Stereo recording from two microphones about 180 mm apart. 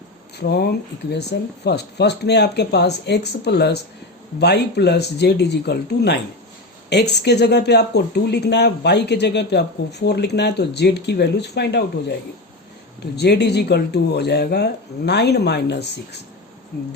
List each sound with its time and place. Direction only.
0.3 s speech: 60° left (ahead or behind)
13.1 s speech: 70° left (ahead or behind)